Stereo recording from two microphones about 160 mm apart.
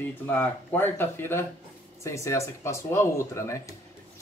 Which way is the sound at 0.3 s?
10° left (ahead or behind).